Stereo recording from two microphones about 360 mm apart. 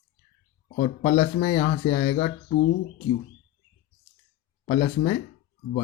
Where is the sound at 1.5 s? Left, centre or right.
Centre.